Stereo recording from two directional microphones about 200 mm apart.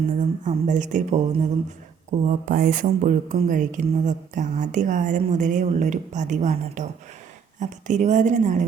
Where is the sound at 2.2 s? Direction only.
40° right (ahead or behind).